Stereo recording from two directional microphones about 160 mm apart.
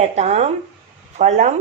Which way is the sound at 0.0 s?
45° right (ahead or behind).